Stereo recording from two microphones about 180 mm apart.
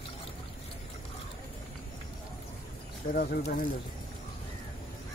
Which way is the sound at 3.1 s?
55° left (ahead or behind).